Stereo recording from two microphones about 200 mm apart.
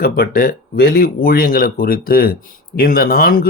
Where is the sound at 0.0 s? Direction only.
50° left (ahead or behind).